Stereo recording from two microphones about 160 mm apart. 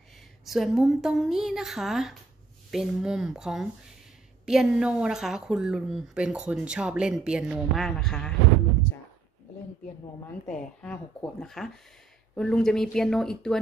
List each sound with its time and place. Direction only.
0.5 s a woman's voice: centre (ahead or behind)
10.2 s a woman's voice: 5° left (ahead or behind)